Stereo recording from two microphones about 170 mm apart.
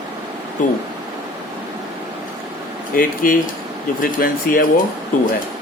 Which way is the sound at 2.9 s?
55° left (ahead or behind).